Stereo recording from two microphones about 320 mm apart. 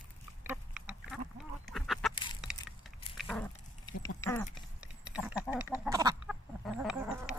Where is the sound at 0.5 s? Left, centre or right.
Centre.